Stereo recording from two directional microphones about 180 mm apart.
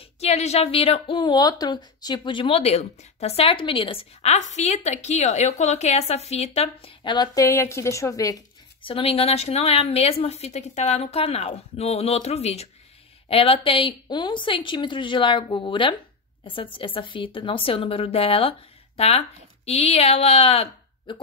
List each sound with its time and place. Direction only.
0.2 s a woman's voice: 35° left (ahead or behind); by 8.4 s 20° left (ahead or behind)
8.8 s a woman's voice: 30° left (ahead or behind)